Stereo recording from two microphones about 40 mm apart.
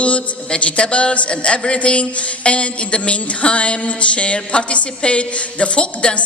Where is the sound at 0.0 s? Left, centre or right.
Left.